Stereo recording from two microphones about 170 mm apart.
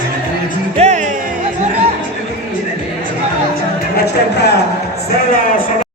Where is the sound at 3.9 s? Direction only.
75° left (ahead or behind).